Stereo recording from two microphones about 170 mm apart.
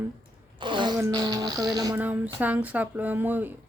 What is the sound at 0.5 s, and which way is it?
Music, 30° right (ahead or behind).